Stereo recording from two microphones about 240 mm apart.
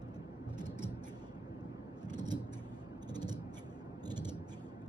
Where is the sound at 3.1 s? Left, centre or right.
Centre.